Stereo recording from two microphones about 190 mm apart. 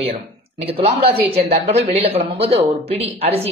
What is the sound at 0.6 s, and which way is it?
Speech, 30° right (ahead or behind).